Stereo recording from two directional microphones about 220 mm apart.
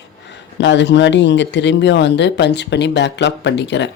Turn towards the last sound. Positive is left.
turn(degrees=50)  # may be behind; listen again after turning